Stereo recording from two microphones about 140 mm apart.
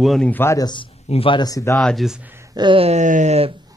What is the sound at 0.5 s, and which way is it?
Speech, 30° left (ahead or behind).